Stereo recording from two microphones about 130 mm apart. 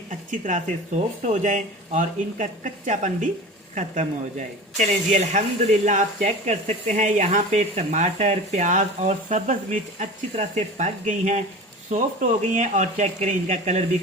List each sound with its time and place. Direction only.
0.3 s speech: 80° right; by 13.8 s 60° right (ahead or behind)